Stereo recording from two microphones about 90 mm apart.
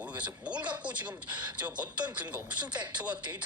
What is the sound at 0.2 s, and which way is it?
Speech, 15° right (ahead or behind).